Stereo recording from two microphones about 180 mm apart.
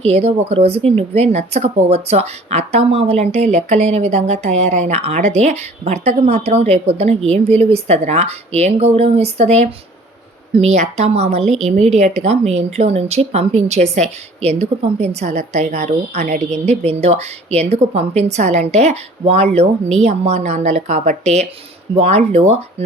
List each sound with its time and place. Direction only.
0.0 s a woman's voice: 35° right (ahead or behind)